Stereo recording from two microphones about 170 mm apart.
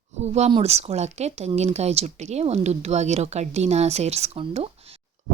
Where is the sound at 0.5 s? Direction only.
40° right (ahead or behind).